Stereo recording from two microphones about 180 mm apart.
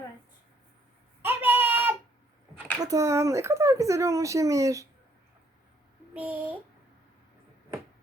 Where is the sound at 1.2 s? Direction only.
10° right (ahead or behind).